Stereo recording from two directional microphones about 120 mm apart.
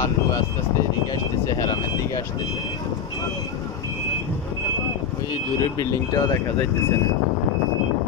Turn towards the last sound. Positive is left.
turn(degrees=30)  # may be behind; listen again after turning